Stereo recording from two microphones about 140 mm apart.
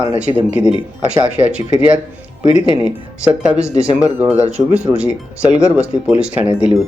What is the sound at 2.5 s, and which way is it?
Speech, 45° left (ahead or behind).